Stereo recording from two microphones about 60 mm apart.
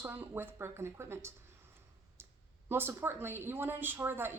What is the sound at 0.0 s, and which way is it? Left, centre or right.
Speech, right.